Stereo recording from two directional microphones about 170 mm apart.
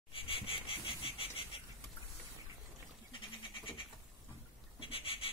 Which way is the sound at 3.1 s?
30° left (ahead or behind).